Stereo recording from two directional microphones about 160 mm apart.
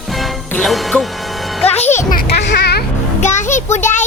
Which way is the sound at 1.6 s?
40° left (ahead or behind).